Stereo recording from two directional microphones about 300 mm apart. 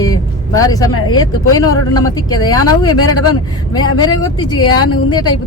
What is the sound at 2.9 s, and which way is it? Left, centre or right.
Speech, left.